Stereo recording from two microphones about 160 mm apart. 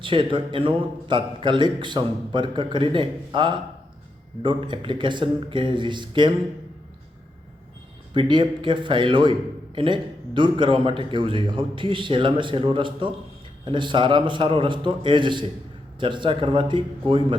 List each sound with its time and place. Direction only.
0.0 s a man's voice: 30° right (ahead or behind)
8.1 s a man's voice: 30° right (ahead or behind)